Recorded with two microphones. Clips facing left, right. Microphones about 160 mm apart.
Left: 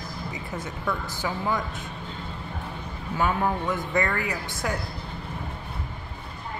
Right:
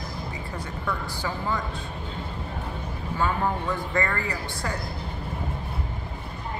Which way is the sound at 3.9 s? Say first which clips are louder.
Left 1 dB; centre (ahead or behind).